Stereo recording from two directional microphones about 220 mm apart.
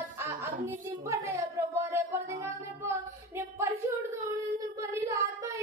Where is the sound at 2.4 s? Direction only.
10° right (ahead or behind).